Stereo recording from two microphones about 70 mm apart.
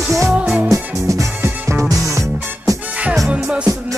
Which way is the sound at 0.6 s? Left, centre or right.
Right.